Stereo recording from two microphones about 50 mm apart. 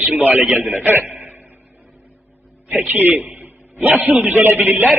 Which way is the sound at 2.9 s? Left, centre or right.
Right.